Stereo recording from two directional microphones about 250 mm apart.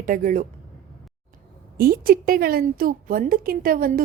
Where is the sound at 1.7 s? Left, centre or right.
Right.